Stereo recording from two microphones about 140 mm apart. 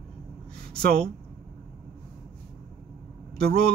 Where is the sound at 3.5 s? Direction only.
90° right.